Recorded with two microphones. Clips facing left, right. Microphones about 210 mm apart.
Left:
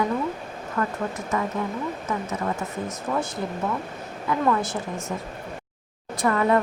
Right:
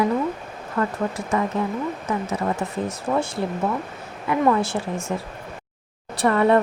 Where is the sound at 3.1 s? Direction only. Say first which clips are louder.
Right 4 dB; 30° right (ahead or behind).